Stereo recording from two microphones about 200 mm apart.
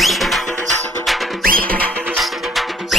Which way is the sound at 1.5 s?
45° right (ahead or behind).